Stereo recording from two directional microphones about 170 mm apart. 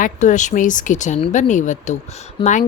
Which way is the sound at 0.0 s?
45° left (ahead or behind).